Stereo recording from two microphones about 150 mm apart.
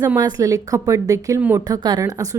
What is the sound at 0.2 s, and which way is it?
A woman's voice, 25° right (ahead or behind).